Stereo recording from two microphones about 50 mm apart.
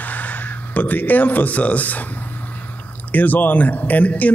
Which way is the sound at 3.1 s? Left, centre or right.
Left.